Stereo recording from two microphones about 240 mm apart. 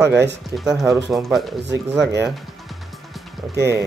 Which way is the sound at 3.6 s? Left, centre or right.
Centre.